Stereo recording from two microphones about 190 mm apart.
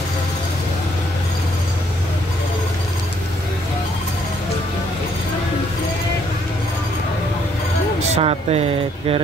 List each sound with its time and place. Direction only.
8.1 s speech: 30° right (ahead or behind)